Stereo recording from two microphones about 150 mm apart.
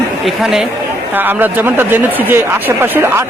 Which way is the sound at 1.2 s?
10° right (ahead or behind).